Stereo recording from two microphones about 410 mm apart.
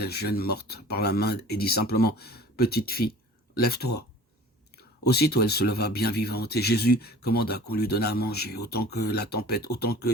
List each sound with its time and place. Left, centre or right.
0.0 s speech: left
5.0 s speech: left